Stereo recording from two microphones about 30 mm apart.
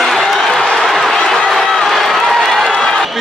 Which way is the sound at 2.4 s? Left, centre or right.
Centre.